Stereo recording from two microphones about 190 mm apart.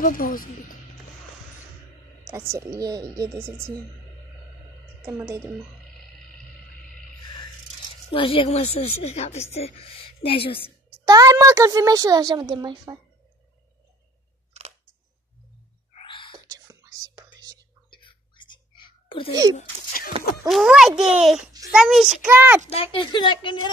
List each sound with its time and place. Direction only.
0.0 s speech: 45° left (ahead or behind)
2.2 s a woman's voice: 15° right (ahead or behind)
5.0 s a woman's voice: 15° right (ahead or behind)
8.1 s a woman's voice: 30° left (ahead or behind)
11.1 s a woman's voice: 20° right (ahead or behind)
16.1 s whispering: 25° left (ahead or behind)
16.4 s whispering: 15° right (ahead or behind)
17.9 s whispering: 25° left (ahead or behind)
19.5 s a sound: 50° left (ahead or behind)
20.4 s a child's voice: centre (ahead or behind)
22.7 s speech: 30° left (ahead or behind)